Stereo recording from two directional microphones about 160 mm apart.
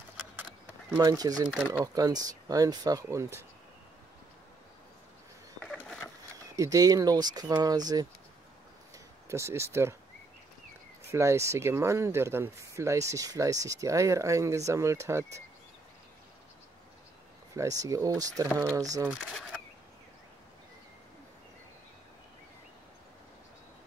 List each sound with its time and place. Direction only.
0.9 s speech: 25° right (ahead or behind)
6.5 s speech: 20° right (ahead or behind)
11.1 s speech: 20° right (ahead or behind)
17.6 s speech: 20° right (ahead or behind)